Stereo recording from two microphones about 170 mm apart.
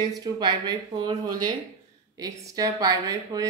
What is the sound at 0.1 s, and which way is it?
A woman's voice, 25° right (ahead or behind).